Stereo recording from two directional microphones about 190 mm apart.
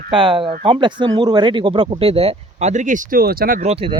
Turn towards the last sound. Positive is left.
turn(degrees=-45)  # may be behind; listen again after turning